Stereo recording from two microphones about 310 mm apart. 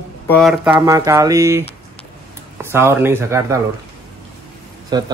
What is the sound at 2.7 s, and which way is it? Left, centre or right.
Speech, centre.